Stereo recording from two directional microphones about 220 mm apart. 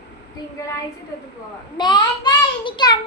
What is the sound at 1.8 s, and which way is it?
Child singing, 20° left (ahead or behind).